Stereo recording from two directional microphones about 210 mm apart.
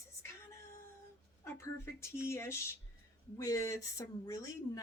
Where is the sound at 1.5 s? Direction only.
10° left (ahead or behind).